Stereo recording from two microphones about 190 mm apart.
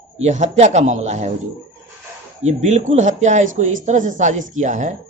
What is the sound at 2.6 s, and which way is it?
Speech, 40° right (ahead or behind).